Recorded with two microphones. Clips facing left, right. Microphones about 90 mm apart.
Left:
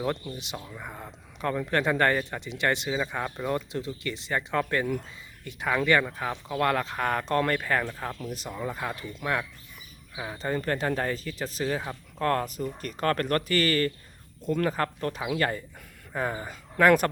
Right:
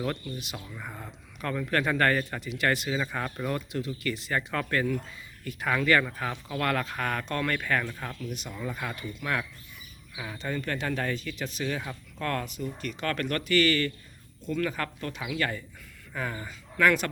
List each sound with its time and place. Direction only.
0.0 s speech: 25° left (ahead or behind)
0.8 s speech: 15° left (ahead or behind)
3.4 s speech: 25° left (ahead or behind)
7.6 s speech: 20° left (ahead or behind)
8.1 s speech: 35° left (ahead or behind)
10.3 s speech: 35° left (ahead or behind)
16.5 s speech: 40° left (ahead or behind)